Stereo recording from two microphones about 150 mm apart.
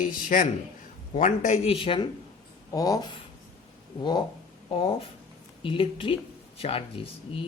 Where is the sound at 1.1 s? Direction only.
50° left (ahead or behind).